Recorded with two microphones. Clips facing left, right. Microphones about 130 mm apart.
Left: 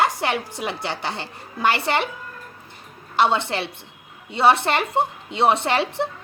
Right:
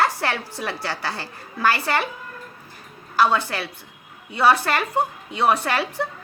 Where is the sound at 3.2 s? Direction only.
25° left (ahead or behind).